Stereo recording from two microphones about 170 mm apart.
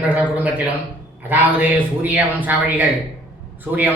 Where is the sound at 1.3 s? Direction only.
10° right (ahead or behind).